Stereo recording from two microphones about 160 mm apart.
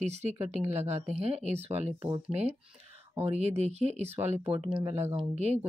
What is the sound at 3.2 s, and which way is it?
Speech, 40° right (ahead or behind).